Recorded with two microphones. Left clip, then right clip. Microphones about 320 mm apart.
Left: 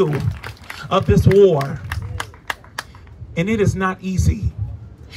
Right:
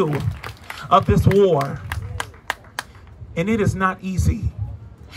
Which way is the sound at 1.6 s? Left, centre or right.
Right.